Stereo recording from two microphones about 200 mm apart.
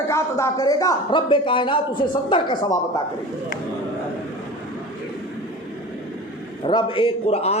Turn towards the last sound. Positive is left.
turn(degrees=30)  # may be behind; listen again after turning